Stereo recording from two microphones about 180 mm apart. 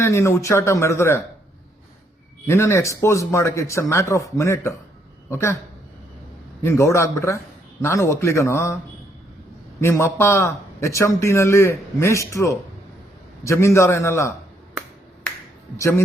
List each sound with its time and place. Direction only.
0.0 s a man's voice: 15° left (ahead or behind)
2.5 s a man's voice: 15° left (ahead or behind)
6.6 s a man's voice: 15° left (ahead or behind)
9.8 s a man's voice: 15° left (ahead or behind)
15.8 s a man's voice: 15° left (ahead or behind)